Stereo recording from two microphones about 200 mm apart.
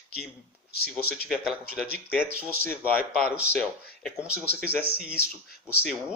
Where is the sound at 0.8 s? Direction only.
50° left (ahead or behind).